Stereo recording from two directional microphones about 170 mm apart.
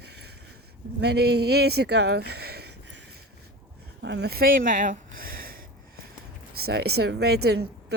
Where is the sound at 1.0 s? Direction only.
75° right (ahead or behind).